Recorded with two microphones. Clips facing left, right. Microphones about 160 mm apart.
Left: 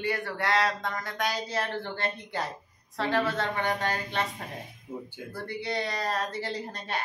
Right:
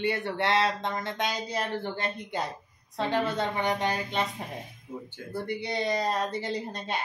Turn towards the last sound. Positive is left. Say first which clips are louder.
# right 2 dB
turn(degrees=-20)  # may be behind; listen again after turning